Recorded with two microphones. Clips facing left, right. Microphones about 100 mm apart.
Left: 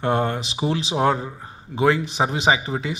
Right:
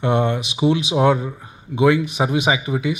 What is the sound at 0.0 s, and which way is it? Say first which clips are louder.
Speech: right 3 dB; 35° left (ahead or behind).